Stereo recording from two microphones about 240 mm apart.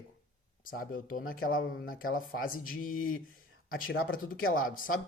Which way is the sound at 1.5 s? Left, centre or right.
Left.